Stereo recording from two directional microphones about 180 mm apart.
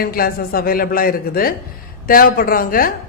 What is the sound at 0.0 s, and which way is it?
A woman's voice, 55° left (ahead or behind).